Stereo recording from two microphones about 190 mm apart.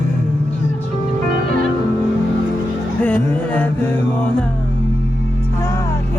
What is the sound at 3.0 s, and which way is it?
Music, 10° left (ahead or behind).